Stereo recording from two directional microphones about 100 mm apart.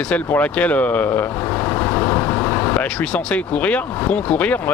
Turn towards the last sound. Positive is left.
turn(degrees=15)  # may be behind; listen again after turning